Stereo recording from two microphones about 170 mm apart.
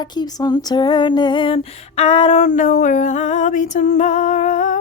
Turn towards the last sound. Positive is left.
turn(degrees=50)  # may be behind; listen again after turning